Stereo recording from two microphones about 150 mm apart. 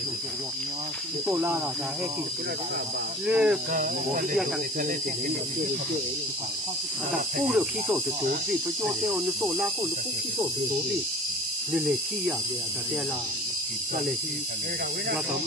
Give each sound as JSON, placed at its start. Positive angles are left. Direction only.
{"t": 1.2, "sound": "speech", "side_deg": -15}
{"t": 3.3, "sound": "speech", "side_deg": -10}
{"t": 3.7, "sound": "speech", "side_deg": -80}
{"t": 7.4, "sound": "speech", "side_deg": -10}
{"t": 11.7, "sound": "speech", "side_deg": -10}